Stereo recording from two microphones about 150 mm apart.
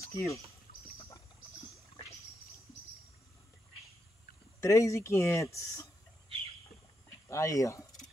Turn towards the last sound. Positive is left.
turn(degrees=20)  # may be behind; listen again after turning